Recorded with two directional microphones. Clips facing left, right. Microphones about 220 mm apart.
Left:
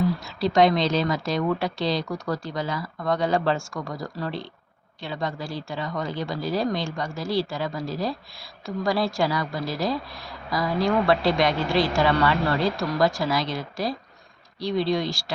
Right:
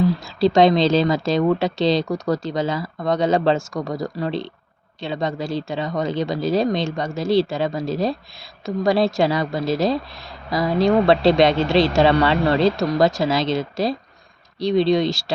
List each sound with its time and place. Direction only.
0.3 s speech: 25° right (ahead or behind)